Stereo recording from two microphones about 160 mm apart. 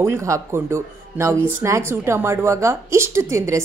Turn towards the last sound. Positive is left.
turn(degrees=-20)  # may be behind; listen again after turning